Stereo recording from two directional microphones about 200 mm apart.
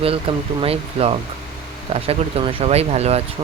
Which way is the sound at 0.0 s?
30° right (ahead or behind).